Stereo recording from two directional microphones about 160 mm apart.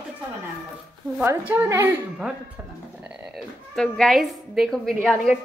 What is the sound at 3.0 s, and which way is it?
A woman's voice, 5° right (ahead or behind).